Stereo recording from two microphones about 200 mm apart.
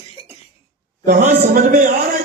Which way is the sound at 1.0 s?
40° right (ahead or behind).